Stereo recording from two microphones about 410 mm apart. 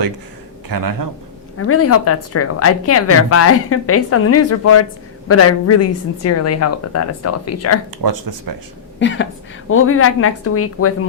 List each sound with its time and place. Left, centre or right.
0.7 s speech: right
1.5 s speech: left
8.0 s speech: right
9.0 s speech: left